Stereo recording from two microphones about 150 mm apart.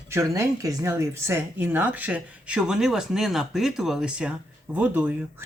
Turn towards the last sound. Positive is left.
turn(degrees=-10)  # may be behind; listen again after turning